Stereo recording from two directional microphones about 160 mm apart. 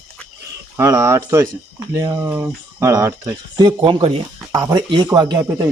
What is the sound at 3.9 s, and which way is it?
Speech, 35° right (ahead or behind).